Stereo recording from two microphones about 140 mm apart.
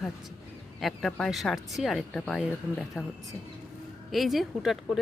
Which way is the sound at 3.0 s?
5° right (ahead or behind).